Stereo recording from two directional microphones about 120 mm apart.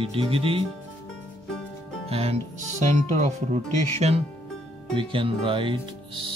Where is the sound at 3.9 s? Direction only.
60° right (ahead or behind).